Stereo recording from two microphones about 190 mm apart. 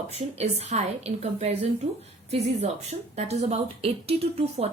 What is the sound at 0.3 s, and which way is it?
A woman's voice, 35° right (ahead or behind).